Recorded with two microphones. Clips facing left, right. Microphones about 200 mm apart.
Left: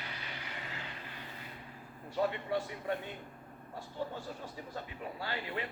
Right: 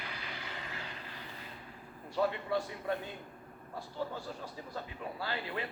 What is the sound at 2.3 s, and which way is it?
Speech, 20° left (ahead or behind).